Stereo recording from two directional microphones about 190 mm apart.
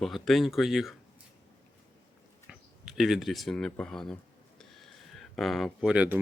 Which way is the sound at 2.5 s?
Centre (ahead or behind).